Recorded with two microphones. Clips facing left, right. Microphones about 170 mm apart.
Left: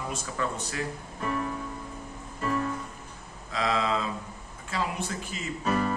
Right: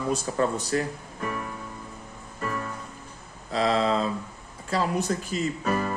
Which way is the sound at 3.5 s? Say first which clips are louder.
Right 4 dB; 35° right (ahead or behind).